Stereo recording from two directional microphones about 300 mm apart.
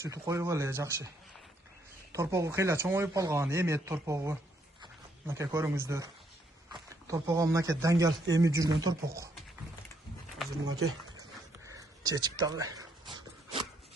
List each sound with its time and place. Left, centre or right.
0.0 s speech: centre
2.1 s speech: centre
10.7 s speech: right
11.6 s a sound: centre